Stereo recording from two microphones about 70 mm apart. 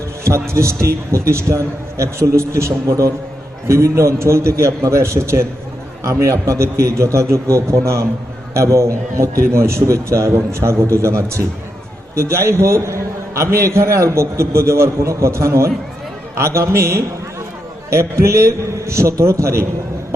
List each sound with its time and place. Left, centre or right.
0.3 s a man's voice: right